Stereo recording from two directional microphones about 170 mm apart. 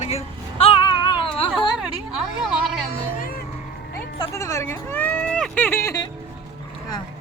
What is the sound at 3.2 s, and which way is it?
Music, 55° left (ahead or behind).